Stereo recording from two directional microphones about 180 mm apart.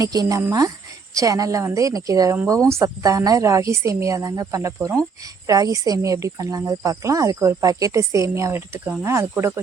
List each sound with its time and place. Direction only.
0.0 s a woman's voice: 20° right (ahead or behind)